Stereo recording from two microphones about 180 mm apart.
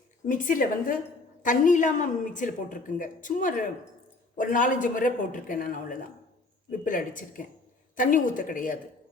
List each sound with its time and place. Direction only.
0.3 s a woman's voice: 45° left (ahead or behind)